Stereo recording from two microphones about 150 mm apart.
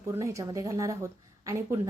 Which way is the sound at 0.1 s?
20° right (ahead or behind).